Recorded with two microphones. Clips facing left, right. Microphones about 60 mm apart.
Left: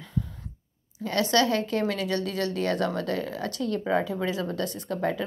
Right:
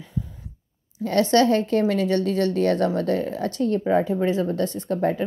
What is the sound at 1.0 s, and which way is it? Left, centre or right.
Speech, right.